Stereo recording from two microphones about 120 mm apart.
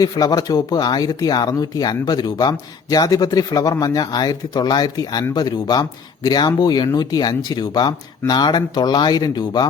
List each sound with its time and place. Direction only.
0.0 s speech: 30° left (ahead or behind)